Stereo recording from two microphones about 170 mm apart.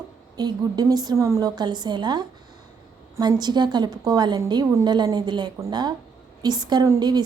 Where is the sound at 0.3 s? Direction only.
25° right (ahead or behind).